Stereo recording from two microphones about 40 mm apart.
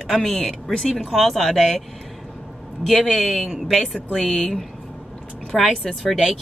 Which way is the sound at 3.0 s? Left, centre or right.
Centre.